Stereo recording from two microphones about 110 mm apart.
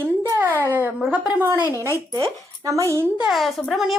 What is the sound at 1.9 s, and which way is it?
Speech, 25° right (ahead or behind).